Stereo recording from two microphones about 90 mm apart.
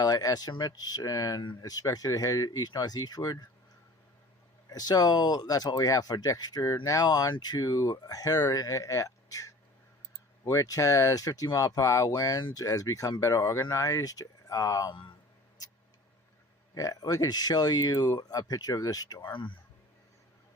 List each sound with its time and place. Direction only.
0.0 s speech: 45° left (ahead or behind)
4.7 s speech: 45° left (ahead or behind)
16.7 s speech: 40° left (ahead or behind); by 19.5 s 60° left (ahead or behind)